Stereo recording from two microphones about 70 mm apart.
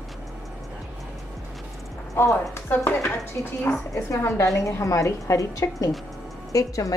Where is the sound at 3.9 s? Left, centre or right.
Left.